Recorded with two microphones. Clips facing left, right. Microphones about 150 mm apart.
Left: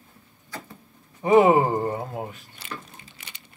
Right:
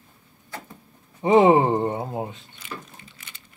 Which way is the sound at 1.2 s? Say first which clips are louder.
Right 1 dB; 25° right (ahead or behind).